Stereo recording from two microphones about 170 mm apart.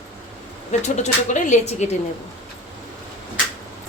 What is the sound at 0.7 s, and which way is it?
Speech, 45° left (ahead or behind).